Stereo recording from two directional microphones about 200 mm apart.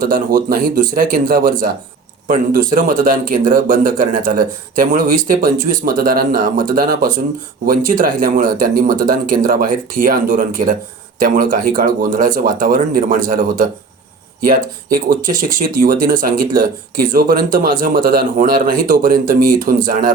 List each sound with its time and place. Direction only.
0.0 s speech: 45° right (ahead or behind)